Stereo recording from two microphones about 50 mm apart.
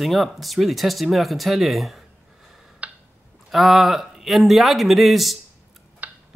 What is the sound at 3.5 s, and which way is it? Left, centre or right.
Speech, centre.